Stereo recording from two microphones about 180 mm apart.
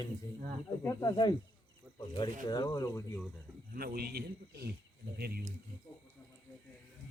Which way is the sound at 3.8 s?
60° right (ahead or behind).